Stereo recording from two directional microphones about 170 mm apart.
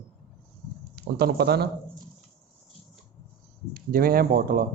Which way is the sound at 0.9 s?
70° right (ahead or behind).